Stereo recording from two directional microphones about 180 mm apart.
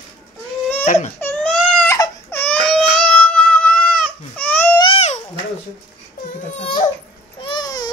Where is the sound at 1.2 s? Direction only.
10° left (ahead or behind).